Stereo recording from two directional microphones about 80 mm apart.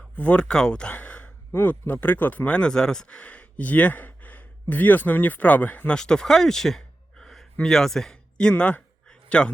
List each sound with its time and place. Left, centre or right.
0.2 s speech: centre